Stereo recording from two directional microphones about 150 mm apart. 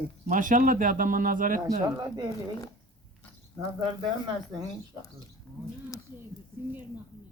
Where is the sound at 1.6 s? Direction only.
25° right (ahead or behind).